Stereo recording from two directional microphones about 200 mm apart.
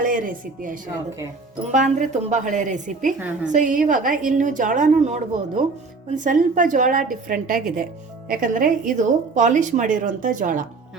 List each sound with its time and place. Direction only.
0.0 s a woman's voice: 45° right (ahead or behind)
3.2 s a woman's voice: 5° right (ahead or behind)
3.5 s a woman's voice: 40° right (ahead or behind)